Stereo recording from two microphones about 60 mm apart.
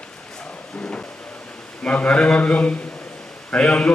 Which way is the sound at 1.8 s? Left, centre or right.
Left.